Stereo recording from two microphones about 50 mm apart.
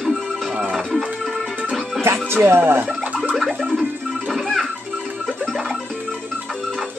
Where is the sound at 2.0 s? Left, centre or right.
Right.